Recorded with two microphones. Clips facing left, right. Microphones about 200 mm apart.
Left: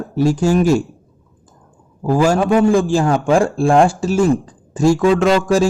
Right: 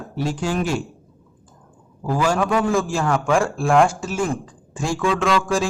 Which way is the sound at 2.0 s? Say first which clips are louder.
Left 6 dB; 45° left (ahead or behind).